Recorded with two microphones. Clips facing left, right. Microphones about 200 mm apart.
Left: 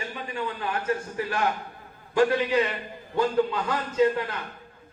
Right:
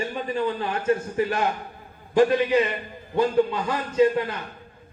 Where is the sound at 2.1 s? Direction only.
20° right (ahead or behind).